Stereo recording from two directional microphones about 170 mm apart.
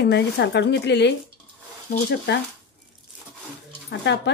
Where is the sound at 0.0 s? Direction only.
85° left.